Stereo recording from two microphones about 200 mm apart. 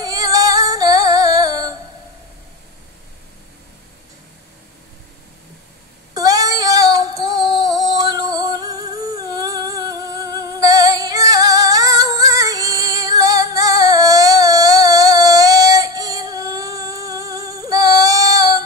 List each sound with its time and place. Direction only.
0.0 s female singing: 20° right (ahead or behind)
6.1 s female singing: 20° right (ahead or behind)